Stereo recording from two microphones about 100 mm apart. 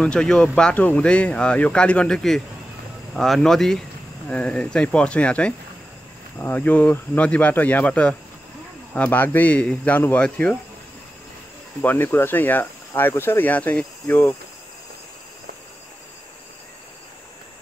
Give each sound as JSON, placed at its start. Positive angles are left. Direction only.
{"t": 0.0, "sound": "speech", "side_deg": 5}
{"t": 11.8, "sound": "speech", "side_deg": 20}